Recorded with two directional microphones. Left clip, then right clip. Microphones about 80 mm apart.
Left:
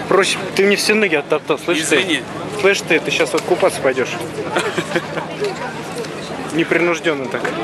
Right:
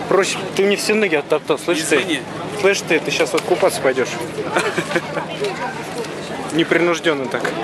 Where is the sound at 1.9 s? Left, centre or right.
Centre.